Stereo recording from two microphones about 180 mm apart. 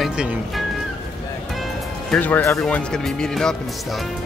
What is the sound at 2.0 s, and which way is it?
Speech, 10° left (ahead or behind).